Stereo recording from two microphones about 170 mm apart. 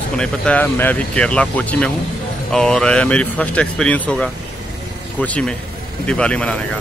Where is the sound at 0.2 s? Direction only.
10° left (ahead or behind).